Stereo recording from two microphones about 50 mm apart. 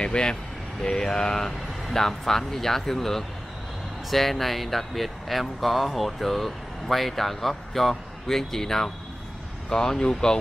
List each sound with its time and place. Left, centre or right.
0.0 s speech: centre